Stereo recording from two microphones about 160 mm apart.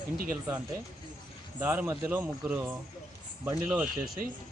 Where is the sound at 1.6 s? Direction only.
10° right (ahead or behind).